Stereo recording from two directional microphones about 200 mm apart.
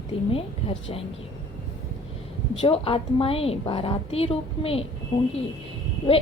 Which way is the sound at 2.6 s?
30° left (ahead or behind).